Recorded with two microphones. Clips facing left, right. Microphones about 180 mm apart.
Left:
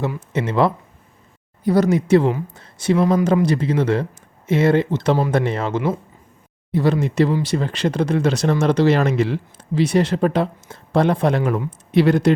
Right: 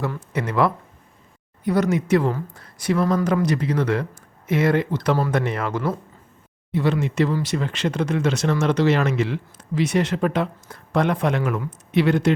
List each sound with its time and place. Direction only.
0.3 s speech: 25° left (ahead or behind)
6.7 s speech: 40° left (ahead or behind)